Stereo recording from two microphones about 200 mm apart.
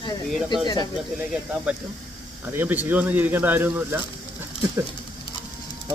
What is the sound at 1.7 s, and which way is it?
Speech, 5° right (ahead or behind).